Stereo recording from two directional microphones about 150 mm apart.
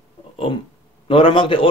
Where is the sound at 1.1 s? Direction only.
35° left (ahead or behind).